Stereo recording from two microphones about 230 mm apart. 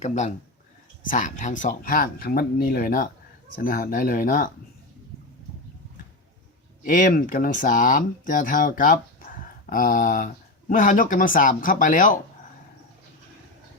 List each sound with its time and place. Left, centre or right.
0.0 s speech: left
6.8 s speech: left